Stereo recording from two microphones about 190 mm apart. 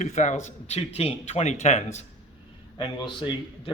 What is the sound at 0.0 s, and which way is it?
Speech, 40° left (ahead or behind).